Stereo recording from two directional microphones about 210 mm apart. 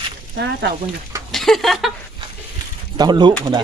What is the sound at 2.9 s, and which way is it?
Speech, 20° right (ahead or behind).